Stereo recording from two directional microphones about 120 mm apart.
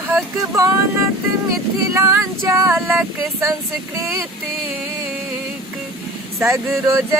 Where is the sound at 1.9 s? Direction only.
25° right (ahead or behind).